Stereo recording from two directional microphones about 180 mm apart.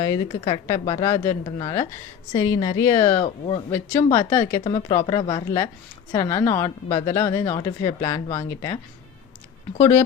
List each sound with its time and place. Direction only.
0.3 s speech: 30° left (ahead or behind)
3.2 s speech: 35° left (ahead or behind)
3.7 s speech: 15° left (ahead or behind)
4.6 s speech: 30° left (ahead or behind); by 6.7 s 15° left (ahead or behind)
6.8 s speech: 30° left (ahead or behind)